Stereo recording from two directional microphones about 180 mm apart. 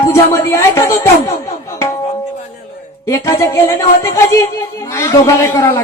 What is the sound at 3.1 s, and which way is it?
Speech, 15° left (ahead or behind).